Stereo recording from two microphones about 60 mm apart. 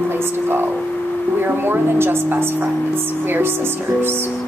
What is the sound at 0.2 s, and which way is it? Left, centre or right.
Speech, right.